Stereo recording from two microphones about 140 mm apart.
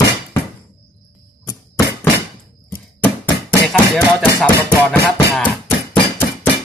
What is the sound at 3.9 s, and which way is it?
Music, 10° left (ahead or behind).